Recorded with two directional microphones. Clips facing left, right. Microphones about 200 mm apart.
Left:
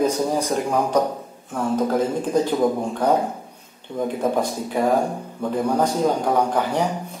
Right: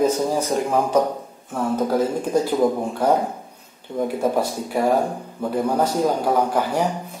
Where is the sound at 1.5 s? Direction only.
10° right (ahead or behind).